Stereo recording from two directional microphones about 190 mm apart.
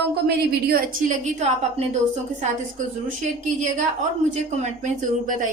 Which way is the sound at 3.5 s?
40° right (ahead or behind).